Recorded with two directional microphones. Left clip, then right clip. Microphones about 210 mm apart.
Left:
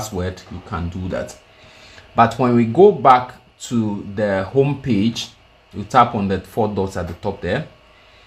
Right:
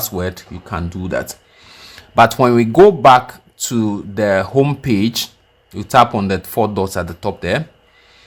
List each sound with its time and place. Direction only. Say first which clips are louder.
0.2 s speech: right 3 dB; 45° right (ahead or behind)